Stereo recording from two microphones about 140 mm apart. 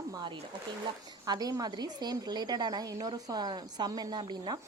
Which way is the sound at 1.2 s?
25° right (ahead or behind).